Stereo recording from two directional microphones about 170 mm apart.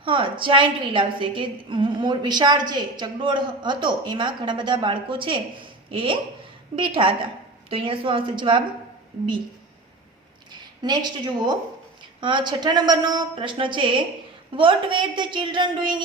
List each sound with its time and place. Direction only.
0.0 s a woman's voice: 30° right (ahead or behind)
10.5 s a woman's voice: 25° right (ahead or behind)